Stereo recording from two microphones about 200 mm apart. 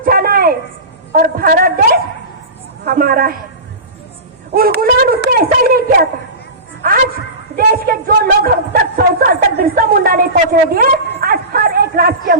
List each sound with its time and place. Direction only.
0.0 s a sound: 50° right (ahead or behind)
1.1 s a woman's voice: 50° right (ahead or behind)
4.5 s a woman's voice: 50° right (ahead or behind)
7.5 s a woman's voice: 45° right (ahead or behind)